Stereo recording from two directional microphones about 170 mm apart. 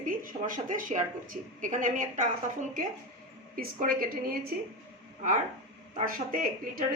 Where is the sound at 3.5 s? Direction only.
55° right (ahead or behind).